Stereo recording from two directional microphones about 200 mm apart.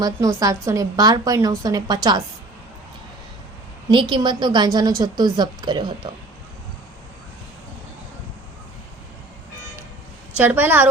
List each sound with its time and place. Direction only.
0.0 s a woman's voice: 15° right (ahead or behind)
3.8 s a woman's voice: 20° right (ahead or behind)
10.3 s a woman's voice: 10° right (ahead or behind)